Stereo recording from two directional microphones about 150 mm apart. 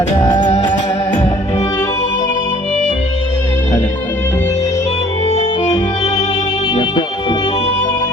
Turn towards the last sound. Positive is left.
turn(degrees=35)  # may be behind; listen again after turning